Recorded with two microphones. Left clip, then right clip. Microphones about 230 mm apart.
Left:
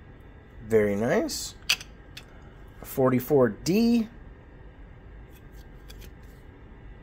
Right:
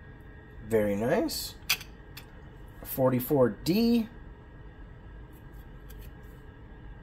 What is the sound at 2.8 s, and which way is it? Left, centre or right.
Speech, left.